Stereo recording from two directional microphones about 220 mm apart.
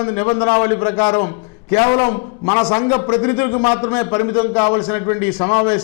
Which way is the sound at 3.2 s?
10° left (ahead or behind).